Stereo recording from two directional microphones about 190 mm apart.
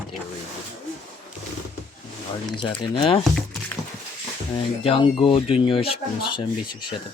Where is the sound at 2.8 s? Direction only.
25° left (ahead or behind).